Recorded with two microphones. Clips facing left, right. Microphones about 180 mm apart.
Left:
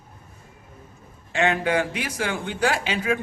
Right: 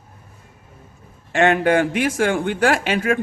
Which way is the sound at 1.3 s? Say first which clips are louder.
Right 6 dB; 55° right (ahead or behind).